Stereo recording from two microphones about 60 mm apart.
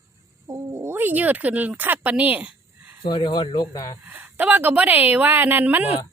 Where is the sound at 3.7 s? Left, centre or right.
Left.